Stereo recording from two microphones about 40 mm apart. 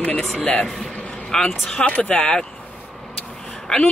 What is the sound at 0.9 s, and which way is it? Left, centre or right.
Vehicle, left.